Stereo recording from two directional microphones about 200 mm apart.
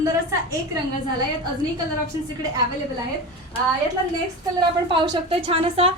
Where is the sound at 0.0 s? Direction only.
15° right (ahead or behind).